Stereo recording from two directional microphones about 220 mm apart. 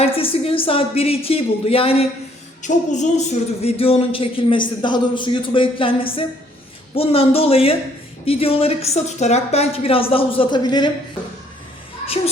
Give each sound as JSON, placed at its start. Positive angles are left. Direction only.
{"t": 0.0, "sound": "speech", "side_deg": 25}